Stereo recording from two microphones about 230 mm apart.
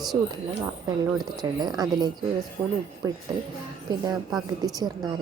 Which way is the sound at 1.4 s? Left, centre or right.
Centre.